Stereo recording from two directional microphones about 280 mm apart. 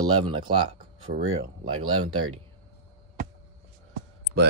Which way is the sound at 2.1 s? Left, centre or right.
Right.